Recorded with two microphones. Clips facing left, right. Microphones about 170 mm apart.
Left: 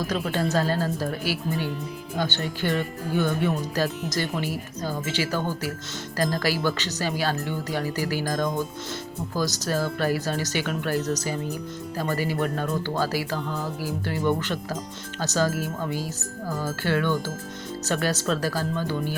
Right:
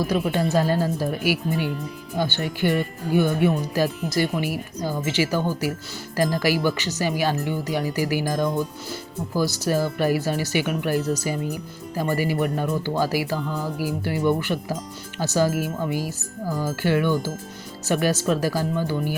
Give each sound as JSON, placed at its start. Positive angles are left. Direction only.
{"t": 0.1, "sound": "speech", "side_deg": -15}
{"t": 9.6, "sound": "speech", "side_deg": -15}